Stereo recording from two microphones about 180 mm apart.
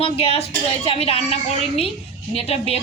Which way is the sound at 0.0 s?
35° left (ahead or behind).